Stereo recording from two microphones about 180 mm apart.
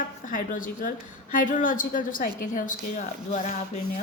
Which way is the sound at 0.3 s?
50° left (ahead or behind).